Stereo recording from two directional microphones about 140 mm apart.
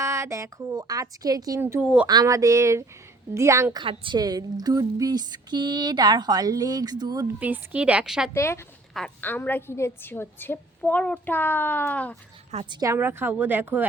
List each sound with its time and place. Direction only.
0.0 s a woman's voice: 20° right (ahead or behind)
1.6 s a woman's voice: 15° right (ahead or behind)
2.0 s a woman's voice: 25° right (ahead or behind)
3.8 s a woman's voice: 35° right (ahead or behind)
7.3 s a woman's voice: 10° right (ahead or behind)
8.3 s speech: 20° left (ahead or behind)
8.9 s a woman's voice: centre (ahead or behind)
9.2 s a woman's voice: 15° left (ahead or behind)
12.6 s a woman's voice: 35° right (ahead or behind)
12.9 s a woman's voice: 15° right (ahead or behind)